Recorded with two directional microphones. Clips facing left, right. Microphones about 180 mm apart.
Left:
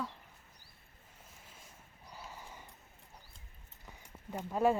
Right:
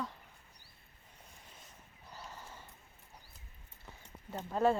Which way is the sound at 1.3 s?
5° left (ahead or behind).